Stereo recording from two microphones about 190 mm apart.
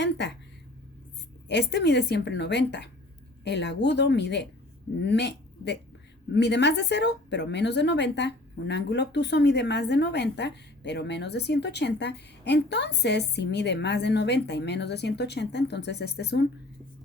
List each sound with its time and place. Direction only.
0.0 s speech: 65° left (ahead or behind)
1.5 s a woman's voice: 65° left (ahead or behind)